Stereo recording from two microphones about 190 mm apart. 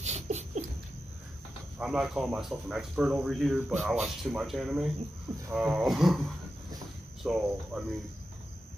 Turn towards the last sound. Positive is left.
turn(degrees=-5)  # may be behind; listen again after turning